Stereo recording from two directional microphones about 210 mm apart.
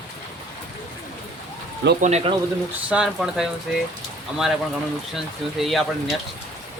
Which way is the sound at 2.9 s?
5° right (ahead or behind).